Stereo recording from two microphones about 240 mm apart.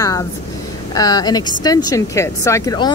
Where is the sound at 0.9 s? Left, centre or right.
Centre.